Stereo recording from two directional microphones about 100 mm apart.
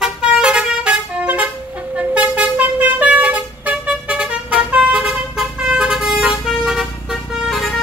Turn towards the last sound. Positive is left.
turn(degrees=0)  # may be behind; listen again after turning